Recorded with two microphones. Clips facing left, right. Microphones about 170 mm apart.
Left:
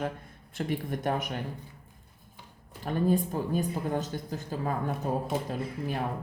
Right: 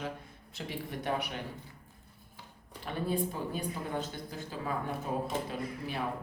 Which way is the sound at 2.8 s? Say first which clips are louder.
Left 6 dB; 45° left (ahead or behind).